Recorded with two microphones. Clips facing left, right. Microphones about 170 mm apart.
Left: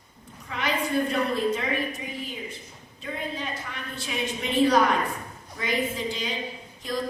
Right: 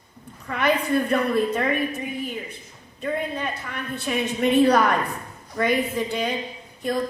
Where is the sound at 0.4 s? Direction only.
55° right (ahead or behind).